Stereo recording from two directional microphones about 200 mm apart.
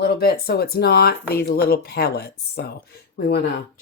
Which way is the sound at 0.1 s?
50° left (ahead or behind).